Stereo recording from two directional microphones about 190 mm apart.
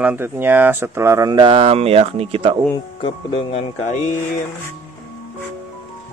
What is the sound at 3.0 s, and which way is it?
Speech, 30° left (ahead or behind).